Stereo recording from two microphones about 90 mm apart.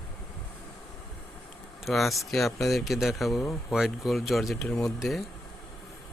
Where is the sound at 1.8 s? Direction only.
Centre (ahead or behind).